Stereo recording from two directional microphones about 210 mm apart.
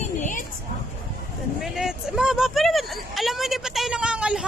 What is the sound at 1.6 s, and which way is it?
Speech, centre (ahead or behind).